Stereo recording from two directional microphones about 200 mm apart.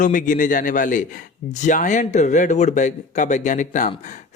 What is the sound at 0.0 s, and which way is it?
Speech, 40° left (ahead or behind).